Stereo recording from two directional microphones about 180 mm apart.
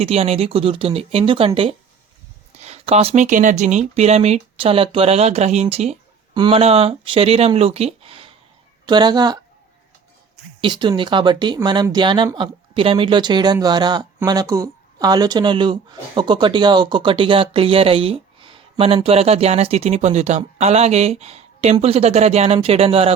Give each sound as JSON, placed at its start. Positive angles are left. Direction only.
{"t": 0.0, "sound": "speech", "side_deg": -35}
{"t": 10.6, "sound": "speech", "side_deg": -25}